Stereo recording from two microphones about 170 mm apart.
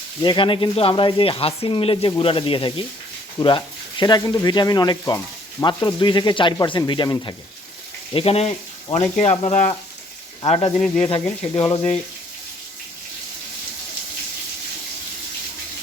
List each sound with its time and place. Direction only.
0.2 s speech: 30° left (ahead or behind)